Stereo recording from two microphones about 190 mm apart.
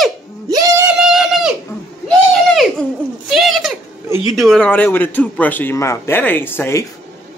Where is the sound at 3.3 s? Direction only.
Centre (ahead or behind).